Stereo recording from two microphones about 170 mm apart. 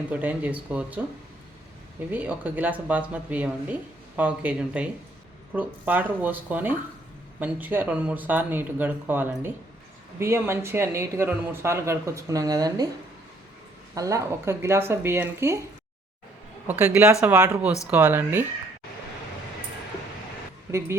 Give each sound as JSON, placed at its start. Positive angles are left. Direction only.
{"t": 0.1, "sound": "a man's voice", "side_deg": -10}
{"t": 2.0, "sound": "a man's voice", "side_deg": -10}
{"t": 13.9, "sound": "a man's voice", "side_deg": -20}
{"t": 16.6, "sound": "a man's voice", "side_deg": -10}
{"t": 20.7, "sound": "speech", "side_deg": -15}